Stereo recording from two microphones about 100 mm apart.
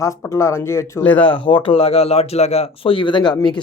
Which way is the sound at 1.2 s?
55° left (ahead or behind).